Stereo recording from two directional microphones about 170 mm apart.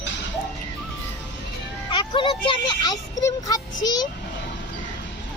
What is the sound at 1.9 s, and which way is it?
Speech, 30° left (ahead or behind).